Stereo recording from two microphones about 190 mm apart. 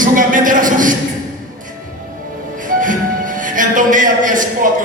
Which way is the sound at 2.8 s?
45° right (ahead or behind).